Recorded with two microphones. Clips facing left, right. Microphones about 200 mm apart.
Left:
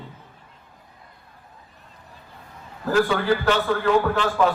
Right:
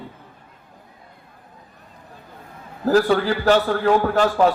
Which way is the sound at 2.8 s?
40° right (ahead or behind).